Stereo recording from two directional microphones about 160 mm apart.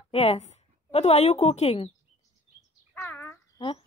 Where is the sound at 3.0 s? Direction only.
10° left (ahead or behind).